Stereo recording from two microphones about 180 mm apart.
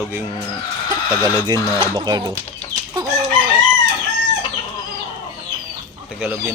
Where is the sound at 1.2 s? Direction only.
25° right (ahead or behind).